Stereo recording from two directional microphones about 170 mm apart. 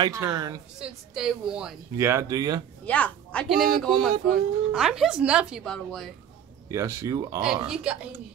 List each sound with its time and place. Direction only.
0.0 s speech: 20° right (ahead or behind)
0.7 s speech: 5° right (ahead or behind)
2.0 s speech: 15° right (ahead or behind)
2.8 s speech: 10° left (ahead or behind)
6.7 s speech: 15° right (ahead or behind)
7.4 s speech: 5° right (ahead or behind)